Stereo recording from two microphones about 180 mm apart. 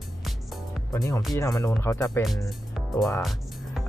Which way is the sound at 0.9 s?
15° left (ahead or behind).